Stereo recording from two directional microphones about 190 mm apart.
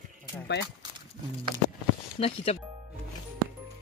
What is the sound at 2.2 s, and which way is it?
Speech, 30° left (ahead or behind).